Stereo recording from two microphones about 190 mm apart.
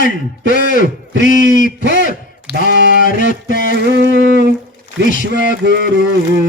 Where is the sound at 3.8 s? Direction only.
65° right (ahead or behind).